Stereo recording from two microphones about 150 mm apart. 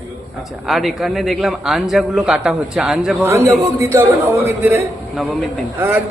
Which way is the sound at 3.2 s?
20° right (ahead or behind).